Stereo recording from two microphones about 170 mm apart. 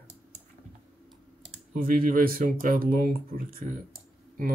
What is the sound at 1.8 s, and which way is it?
Speech, 55° right (ahead or behind).